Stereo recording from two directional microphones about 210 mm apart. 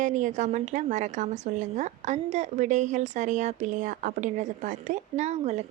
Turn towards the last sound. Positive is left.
turn(degrees=-30)  # may be behind; listen again after turning